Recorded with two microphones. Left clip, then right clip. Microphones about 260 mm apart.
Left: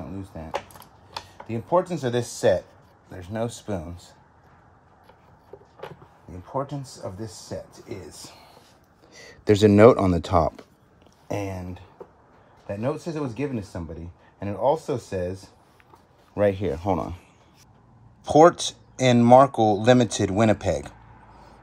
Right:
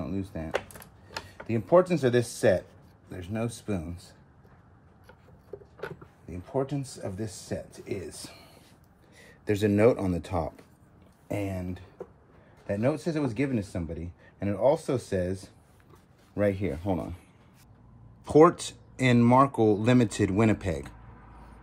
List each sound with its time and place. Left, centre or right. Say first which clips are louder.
0.1 s speech: right 2 dB; centre
1.5 s speech: right 1 dB; centre
6.5 s speech: left 1 dB; centre
8.1 s speech: left 1 dB; centre
9.1 s speech: left 9 dB; left
18.2 s speech: left 4 dB; centre